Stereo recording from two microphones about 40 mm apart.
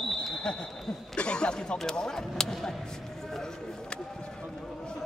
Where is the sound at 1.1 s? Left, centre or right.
Left.